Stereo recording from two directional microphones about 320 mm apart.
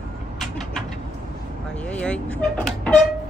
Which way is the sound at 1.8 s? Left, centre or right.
Centre.